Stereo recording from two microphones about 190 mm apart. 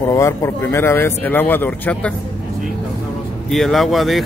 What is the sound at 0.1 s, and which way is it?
Speech, 15° left (ahead or behind).